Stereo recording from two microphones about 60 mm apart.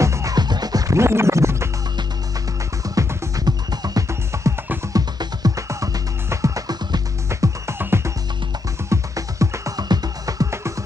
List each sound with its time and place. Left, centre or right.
0.0 s music: right
0.9 s scratch: right
3.3 s music: right
4.1 s music: right
4.9 s music: right
6.3 s music: right
7.8 s music: right
8.8 s music: right